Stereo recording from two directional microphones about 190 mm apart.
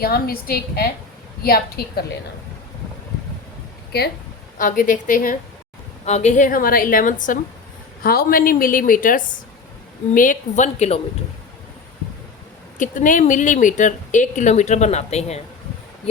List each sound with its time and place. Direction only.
0.0 s a woman's voice: 55° left (ahead or behind)
3.9 s a woman's voice: 55° left (ahead or behind)
4.5 s a woman's voice: 45° left (ahead or behind)
12.8 s speech: 45° left (ahead or behind)